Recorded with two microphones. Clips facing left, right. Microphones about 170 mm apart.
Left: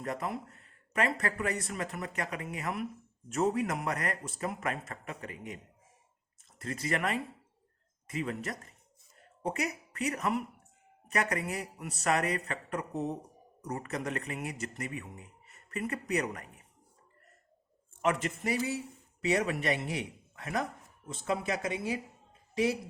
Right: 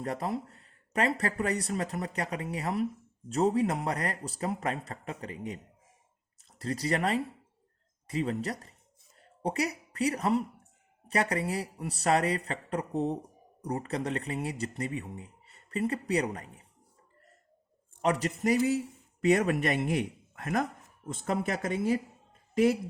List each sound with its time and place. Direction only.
0.0 s speech: 35° right (ahead or behind)
6.6 s speech: 35° right (ahead or behind)
18.0 s a man's voice: 35° right (ahead or behind)